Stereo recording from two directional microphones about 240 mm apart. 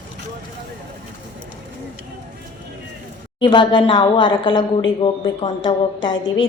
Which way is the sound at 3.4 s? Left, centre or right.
Left.